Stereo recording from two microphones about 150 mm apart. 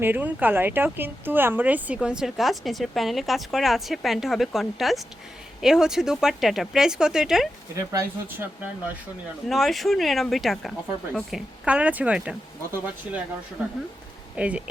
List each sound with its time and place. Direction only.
0.0 s speech: 15° right (ahead or behind)
7.8 s speech: 15° right (ahead or behind)
9.5 s speech: centre (ahead or behind)
14.3 s speech: 10° right (ahead or behind)